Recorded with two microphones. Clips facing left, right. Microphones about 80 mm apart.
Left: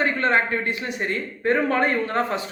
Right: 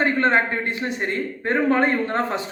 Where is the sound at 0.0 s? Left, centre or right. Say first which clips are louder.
Right 2 dB; right.